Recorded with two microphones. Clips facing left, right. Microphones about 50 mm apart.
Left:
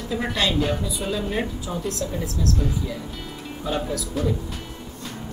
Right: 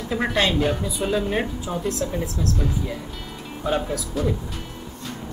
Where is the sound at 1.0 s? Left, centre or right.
Right.